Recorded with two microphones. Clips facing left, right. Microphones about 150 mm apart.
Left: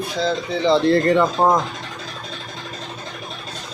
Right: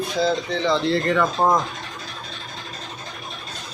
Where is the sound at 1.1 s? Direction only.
25° left (ahead or behind).